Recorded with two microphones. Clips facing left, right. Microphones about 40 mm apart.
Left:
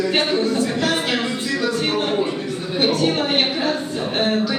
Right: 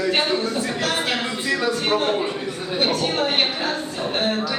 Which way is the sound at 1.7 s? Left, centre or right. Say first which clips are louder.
Left 1 dB; centre.